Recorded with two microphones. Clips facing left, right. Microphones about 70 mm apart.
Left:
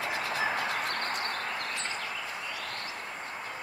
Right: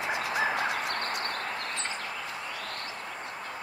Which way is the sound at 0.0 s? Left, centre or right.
Centre.